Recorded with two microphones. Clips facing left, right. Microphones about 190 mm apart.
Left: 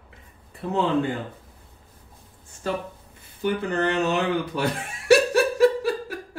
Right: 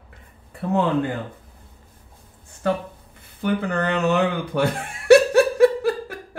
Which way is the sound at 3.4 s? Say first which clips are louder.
Right 1 dB; 60° right (ahead or behind).